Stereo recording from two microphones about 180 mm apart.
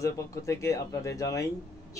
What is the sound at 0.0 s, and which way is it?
Speech, 15° left (ahead or behind).